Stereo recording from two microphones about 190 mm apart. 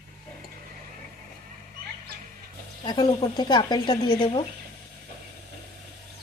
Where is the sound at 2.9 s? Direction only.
20° left (ahead or behind).